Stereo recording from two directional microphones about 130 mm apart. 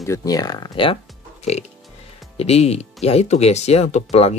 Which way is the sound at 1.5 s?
55° left (ahead or behind).